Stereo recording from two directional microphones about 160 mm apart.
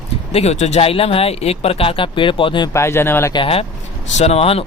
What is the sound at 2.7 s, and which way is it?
Speech, 15° left (ahead or behind).